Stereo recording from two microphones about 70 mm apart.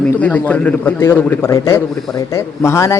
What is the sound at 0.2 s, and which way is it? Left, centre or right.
Speech, left.